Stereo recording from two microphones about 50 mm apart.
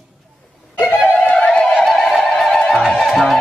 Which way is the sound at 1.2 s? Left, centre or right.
Centre.